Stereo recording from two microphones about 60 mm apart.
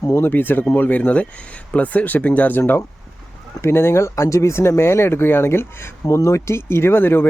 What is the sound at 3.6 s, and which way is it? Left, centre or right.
Speech, left.